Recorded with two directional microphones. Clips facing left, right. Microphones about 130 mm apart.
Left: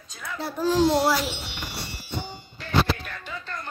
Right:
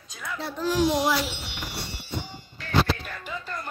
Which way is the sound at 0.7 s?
15° right (ahead or behind).